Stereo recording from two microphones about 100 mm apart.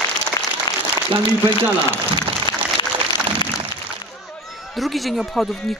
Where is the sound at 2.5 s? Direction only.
50° left (ahead or behind).